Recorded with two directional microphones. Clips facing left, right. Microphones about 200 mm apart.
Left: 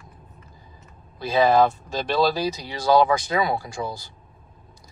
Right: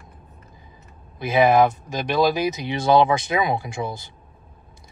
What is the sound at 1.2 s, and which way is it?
Speech, 20° right (ahead or behind).